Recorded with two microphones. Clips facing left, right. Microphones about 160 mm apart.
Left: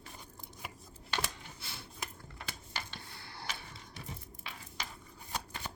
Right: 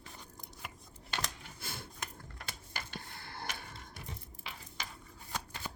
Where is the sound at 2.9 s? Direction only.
50° right (ahead or behind).